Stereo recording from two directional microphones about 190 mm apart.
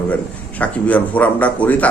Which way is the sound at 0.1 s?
5° left (ahead or behind).